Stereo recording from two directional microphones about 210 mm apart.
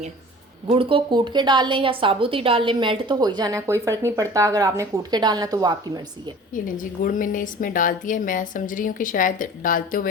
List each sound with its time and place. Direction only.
0.7 s a woman's voice: 25° right (ahead or behind)
6.5 s a woman's voice: 40° left (ahead or behind)